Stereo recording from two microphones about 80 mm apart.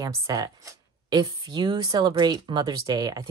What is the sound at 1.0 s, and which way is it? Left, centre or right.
Speech, right.